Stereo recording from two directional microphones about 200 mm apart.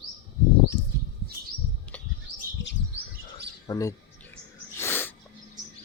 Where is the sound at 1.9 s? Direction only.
5° left (ahead or behind).